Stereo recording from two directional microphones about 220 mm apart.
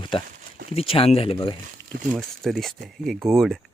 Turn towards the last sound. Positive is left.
turn(degrees=0)  # may be behind; listen again after turning